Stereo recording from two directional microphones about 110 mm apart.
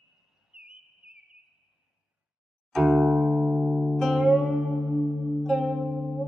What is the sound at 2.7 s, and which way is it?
Music, centre (ahead or behind).